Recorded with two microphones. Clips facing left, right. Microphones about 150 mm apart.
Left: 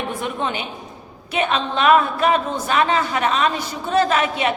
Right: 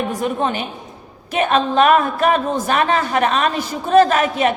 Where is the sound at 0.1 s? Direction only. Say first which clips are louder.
Right 4 dB; 40° right (ahead or behind).